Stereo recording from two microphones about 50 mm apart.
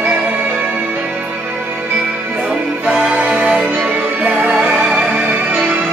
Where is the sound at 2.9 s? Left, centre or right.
Centre.